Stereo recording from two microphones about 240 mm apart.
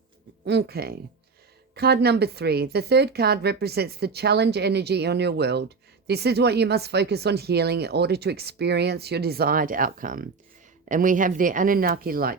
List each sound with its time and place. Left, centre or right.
0.4 s speech: right